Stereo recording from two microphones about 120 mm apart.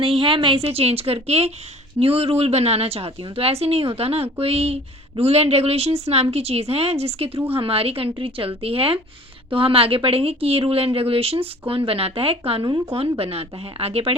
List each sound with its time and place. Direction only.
0.0 s speech: 50° right (ahead or behind)